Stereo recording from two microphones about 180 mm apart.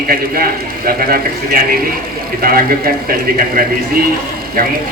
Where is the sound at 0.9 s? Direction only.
55° right (ahead or behind).